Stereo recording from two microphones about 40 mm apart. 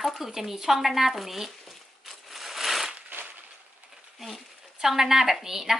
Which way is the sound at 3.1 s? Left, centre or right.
Right.